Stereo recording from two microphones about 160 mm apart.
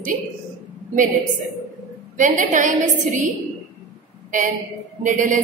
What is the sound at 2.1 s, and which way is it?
Speech, 55° right (ahead or behind).